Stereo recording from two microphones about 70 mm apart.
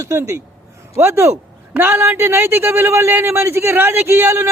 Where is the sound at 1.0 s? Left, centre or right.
Right.